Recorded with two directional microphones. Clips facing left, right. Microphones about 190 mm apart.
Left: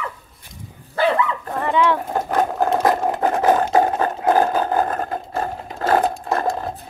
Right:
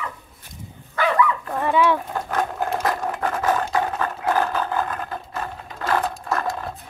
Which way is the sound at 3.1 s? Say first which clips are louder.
Left 5 dB; 30° left (ahead or behind).